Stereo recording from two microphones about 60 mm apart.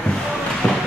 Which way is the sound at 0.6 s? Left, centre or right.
Centre.